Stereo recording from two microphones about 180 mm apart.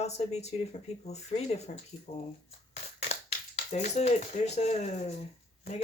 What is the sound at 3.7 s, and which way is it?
Speech, 35° left (ahead or behind).